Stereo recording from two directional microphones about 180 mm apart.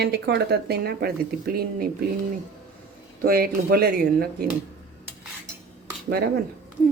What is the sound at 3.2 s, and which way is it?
Speech, 60° right (ahead or behind).